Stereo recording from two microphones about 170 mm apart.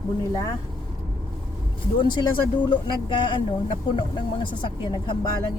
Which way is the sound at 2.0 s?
25° left (ahead or behind).